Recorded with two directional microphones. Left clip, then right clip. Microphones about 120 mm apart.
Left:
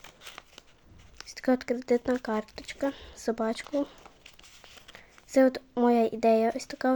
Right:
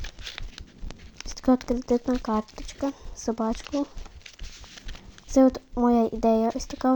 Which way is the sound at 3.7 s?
50° left (ahead or behind).